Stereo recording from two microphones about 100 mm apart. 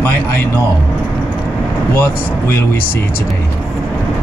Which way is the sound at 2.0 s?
25° left (ahead or behind).